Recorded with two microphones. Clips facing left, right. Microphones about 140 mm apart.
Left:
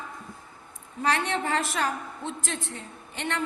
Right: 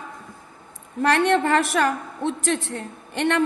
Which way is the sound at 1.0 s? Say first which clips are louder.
Right 8 dB; 65° right (ahead or behind).